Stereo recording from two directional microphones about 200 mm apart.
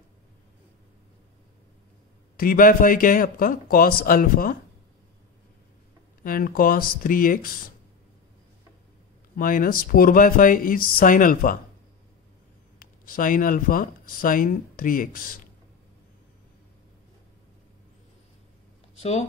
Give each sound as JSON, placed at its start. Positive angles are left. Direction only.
{"t": 2.3, "sound": "a man's voice", "side_deg": 45}
{"t": 6.2, "sound": "a man's voice", "side_deg": 45}
{"t": 9.4, "sound": "a man's voice", "side_deg": 45}
{"t": 12.7, "sound": "speech", "side_deg": 45}
{"t": 18.9, "sound": "speech", "side_deg": 35}